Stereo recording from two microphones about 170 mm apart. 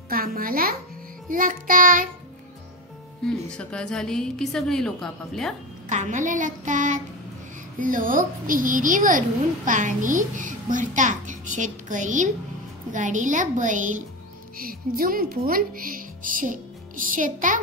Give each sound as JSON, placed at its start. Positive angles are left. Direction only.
{"t": 0.1, "sound": "a child's voice", "side_deg": -60}
{"t": 3.3, "sound": "a woman's voice", "side_deg": 5}
{"t": 5.9, "sound": "a child's voice", "side_deg": -45}
{"t": 14.6, "sound": "speech", "side_deg": -60}